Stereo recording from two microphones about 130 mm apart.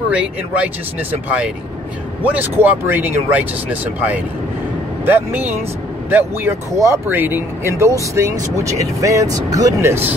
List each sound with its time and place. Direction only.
0.1 s speech: 10° right (ahead or behind)
2.2 s speech: 15° right (ahead or behind)